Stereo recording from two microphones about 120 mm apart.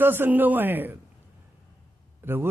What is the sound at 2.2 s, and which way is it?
Speech, 20° right (ahead or behind).